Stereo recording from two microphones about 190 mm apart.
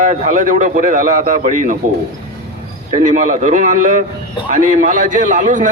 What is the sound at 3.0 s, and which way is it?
A man's voice, 40° right (ahead or behind).